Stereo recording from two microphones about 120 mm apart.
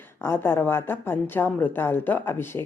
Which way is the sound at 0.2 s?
20° left (ahead or behind).